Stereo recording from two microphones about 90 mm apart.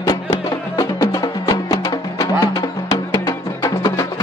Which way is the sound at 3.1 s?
55° left (ahead or behind).